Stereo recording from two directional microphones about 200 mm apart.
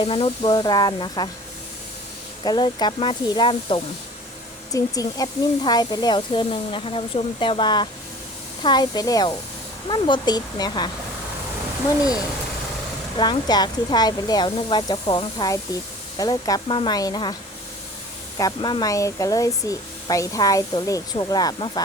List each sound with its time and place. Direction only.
0.0 s speech: 30° left (ahead or behind)
2.4 s speech: 20° left (ahead or behind)
13.1 s speech: 20° left (ahead or behind)
18.3 s speech: 20° left (ahead or behind)